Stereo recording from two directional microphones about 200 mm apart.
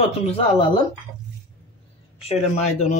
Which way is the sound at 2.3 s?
35° left (ahead or behind).